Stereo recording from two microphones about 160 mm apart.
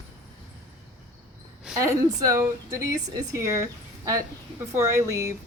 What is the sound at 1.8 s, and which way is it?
Speech, 20° right (ahead or behind).